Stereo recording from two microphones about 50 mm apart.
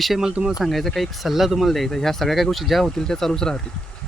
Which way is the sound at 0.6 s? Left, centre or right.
Centre.